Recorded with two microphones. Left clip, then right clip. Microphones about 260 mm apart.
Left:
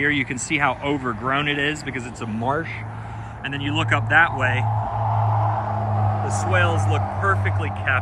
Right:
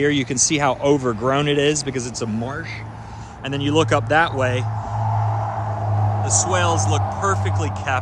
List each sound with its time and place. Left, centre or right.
0.0 s speech: centre
3.5 s speech: centre
6.5 s speech: centre